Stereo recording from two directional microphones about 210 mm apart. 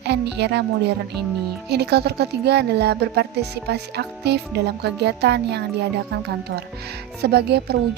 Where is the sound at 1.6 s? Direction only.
50° right (ahead or behind).